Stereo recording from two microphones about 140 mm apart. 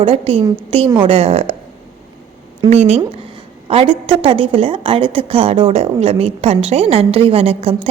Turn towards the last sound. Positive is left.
turn(degrees=-45)  # may be behind; listen again after turning